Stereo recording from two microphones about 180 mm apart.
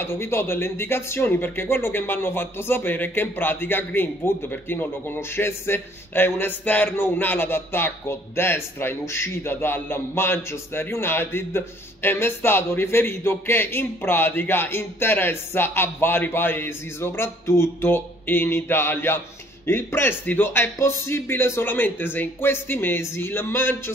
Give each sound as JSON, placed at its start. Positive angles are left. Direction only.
{"t": 0.0, "sound": "speech", "side_deg": 15}